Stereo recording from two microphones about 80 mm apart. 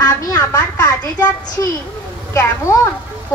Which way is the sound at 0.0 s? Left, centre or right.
Left.